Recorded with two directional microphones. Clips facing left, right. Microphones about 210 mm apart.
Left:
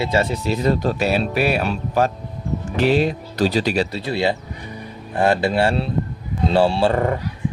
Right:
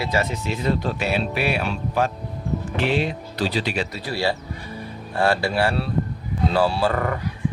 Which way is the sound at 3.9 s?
20° left (ahead or behind).